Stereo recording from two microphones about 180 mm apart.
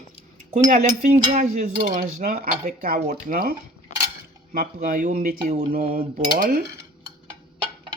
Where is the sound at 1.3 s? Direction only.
45° right (ahead or behind).